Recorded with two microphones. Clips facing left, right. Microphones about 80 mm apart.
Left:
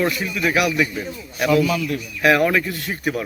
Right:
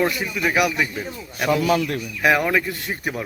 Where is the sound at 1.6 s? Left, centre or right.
Right.